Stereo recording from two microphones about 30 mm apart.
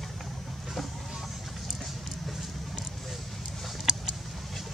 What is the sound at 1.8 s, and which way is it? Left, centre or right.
Vehicle, centre.